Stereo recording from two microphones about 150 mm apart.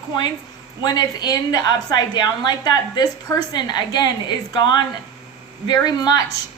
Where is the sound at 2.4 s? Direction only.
25° left (ahead or behind).